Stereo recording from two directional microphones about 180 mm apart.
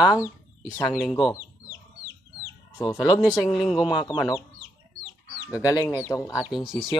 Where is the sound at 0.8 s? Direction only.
Centre (ahead or behind).